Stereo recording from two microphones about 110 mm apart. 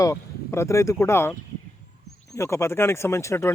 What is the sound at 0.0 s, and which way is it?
Speech, 25° left (ahead or behind).